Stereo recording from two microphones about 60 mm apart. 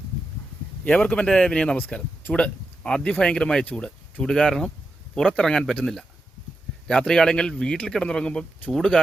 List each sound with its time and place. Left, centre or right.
0.9 s speech: centre
7.1 s speech: centre